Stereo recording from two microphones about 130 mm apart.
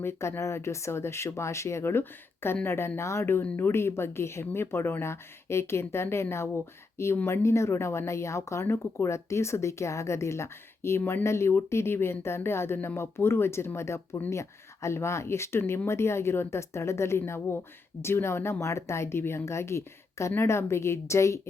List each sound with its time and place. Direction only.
0.0 s speech: 20° left (ahead or behind)